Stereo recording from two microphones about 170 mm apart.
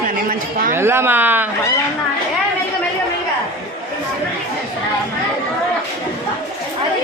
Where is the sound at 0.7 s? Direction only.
15° right (ahead or behind).